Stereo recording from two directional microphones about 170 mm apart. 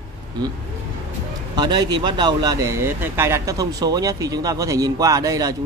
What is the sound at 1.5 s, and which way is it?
Speech, 25° right (ahead or behind).